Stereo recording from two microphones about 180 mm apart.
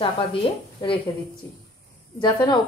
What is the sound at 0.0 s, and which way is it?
Speech, 30° left (ahead or behind).